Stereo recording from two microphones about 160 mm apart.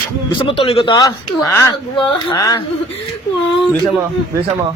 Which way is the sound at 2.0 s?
30° left (ahead or behind).